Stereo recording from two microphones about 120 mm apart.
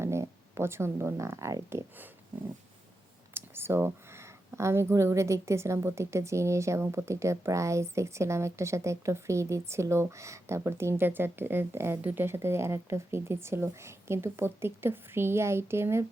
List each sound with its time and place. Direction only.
0.0 s speech: 25° right (ahead or behind)
3.3 s speech: 20° right (ahead or behind)